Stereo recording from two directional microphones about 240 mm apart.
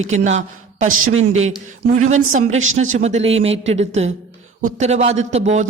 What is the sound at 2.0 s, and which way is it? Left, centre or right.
Speech, right.